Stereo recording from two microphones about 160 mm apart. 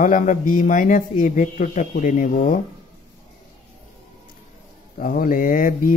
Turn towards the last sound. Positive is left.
turn(degrees=60)  # may be behind; listen again after turning